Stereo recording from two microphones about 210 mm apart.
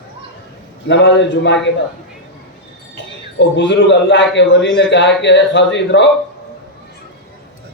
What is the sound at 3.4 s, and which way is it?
A man's voice, 60° left (ahead or behind).